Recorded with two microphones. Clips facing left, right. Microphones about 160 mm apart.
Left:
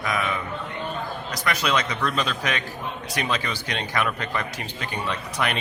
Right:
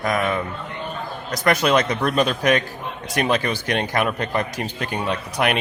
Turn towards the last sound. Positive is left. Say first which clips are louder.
# right 5 dB
turn(degrees=-55)  # may be behind; listen again after turning